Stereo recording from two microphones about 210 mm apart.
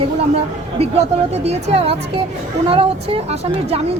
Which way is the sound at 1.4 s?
30° right (ahead or behind).